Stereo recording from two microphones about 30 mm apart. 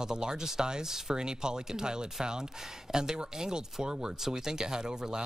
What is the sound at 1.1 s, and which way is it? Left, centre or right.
Speech, right.